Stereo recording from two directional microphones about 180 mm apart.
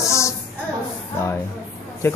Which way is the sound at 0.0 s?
15° left (ahead or behind).